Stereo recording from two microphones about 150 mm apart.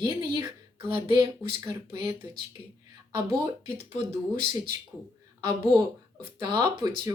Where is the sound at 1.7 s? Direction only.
20° right (ahead or behind).